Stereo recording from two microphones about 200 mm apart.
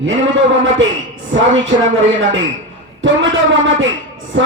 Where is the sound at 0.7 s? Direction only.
70° right (ahead or behind).